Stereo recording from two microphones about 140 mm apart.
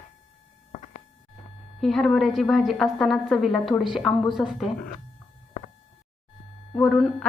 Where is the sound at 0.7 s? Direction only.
55° left (ahead or behind).